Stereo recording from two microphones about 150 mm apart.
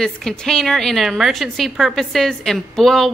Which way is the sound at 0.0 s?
5° left (ahead or behind).